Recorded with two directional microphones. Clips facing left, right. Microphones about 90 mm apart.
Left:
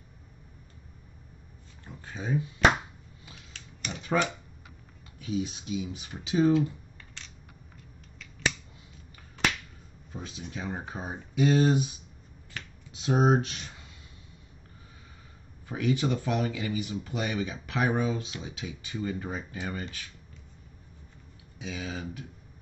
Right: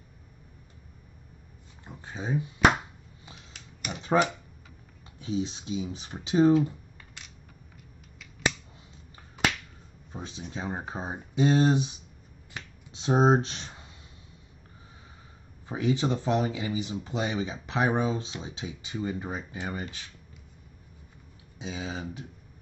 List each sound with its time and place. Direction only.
1.9 s speech: 20° right (ahead or behind)
3.5 s typewriter: 10° right (ahead or behind)
4.0 s typewriter: 30° right (ahead or behind)
5.2 s speech: 30° right (ahead or behind)
10.1 s a sound: 30° right (ahead or behind)
10.5 s speech: 30° right (ahead or behind)
12.6 s finger snapping: 15° right (ahead or behind)
12.9 s speech: 30° right (ahead or behind)
15.6 s speech: 25° right (ahead or behind)
21.5 s speech: 25° right (ahead or behind)